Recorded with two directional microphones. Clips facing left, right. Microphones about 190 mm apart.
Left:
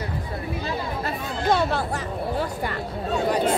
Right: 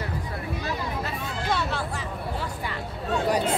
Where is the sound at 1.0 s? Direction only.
45° left (ahead or behind).